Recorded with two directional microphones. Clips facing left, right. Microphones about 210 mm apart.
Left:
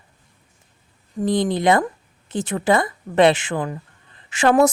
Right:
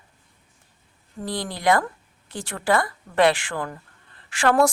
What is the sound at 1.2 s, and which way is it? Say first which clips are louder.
Speech: left 6 dB; 20° left (ahead or behind).